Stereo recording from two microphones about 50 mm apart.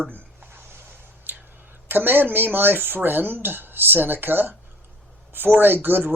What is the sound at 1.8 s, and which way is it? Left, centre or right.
A man's voice, right.